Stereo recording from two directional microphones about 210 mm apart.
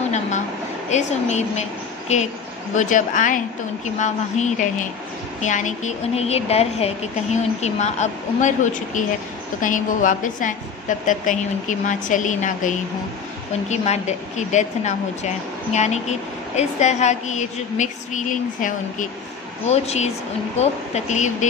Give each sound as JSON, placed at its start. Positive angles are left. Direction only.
{"t": 0.8, "sound": "a woman's voice", "side_deg": 35}